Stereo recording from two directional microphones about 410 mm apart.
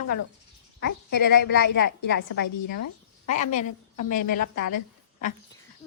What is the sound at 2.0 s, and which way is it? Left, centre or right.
A woman's voice, left.